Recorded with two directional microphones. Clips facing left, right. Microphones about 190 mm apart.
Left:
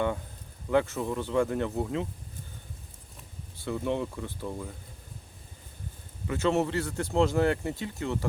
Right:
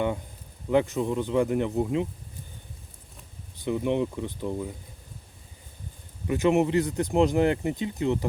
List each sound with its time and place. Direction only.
0.7 s speech: 15° right (ahead or behind)
3.6 s speech: 15° right (ahead or behind)
6.2 s speech: 15° right (ahead or behind)